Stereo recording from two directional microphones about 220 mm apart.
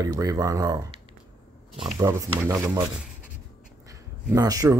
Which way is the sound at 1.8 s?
15° right (ahead or behind).